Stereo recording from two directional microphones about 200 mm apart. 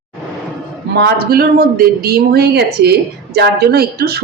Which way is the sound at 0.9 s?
55° right (ahead or behind).